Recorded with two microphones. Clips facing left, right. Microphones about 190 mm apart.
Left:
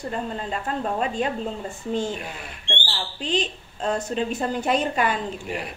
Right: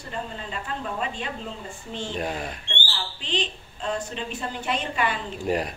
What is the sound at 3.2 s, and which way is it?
A woman's voice, 45° left (ahead or behind).